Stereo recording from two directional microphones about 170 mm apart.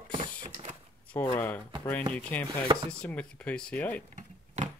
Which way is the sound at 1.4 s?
10° left (ahead or behind).